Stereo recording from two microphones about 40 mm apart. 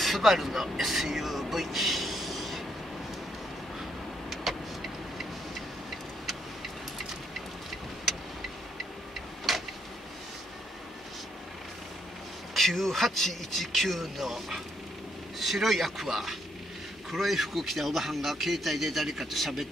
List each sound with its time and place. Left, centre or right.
0.0 s speech: centre
4.5 s vehicle: centre
9.5 s a sound: centre
12.5 s a man's voice: centre
17.1 s a man's voice: centre